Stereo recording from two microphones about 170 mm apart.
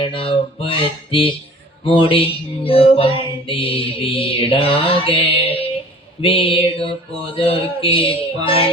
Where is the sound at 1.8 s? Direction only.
30° left (ahead or behind).